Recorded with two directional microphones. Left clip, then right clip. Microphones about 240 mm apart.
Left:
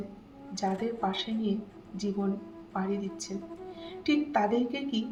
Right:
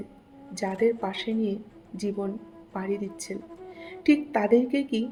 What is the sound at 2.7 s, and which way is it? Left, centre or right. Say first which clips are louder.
A woman's voice: right 2 dB; right.